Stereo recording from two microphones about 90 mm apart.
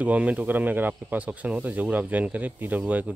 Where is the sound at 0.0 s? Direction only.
15° right (ahead or behind).